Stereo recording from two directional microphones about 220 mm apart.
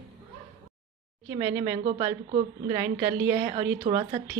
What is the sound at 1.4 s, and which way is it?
A woman's voice, 15° right (ahead or behind).